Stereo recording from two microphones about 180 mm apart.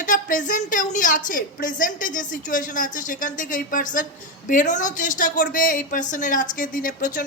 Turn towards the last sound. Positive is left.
turn(degrees=45)  # may be behind; listen again after turning